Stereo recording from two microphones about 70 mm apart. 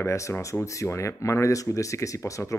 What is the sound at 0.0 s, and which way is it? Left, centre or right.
Speech, left.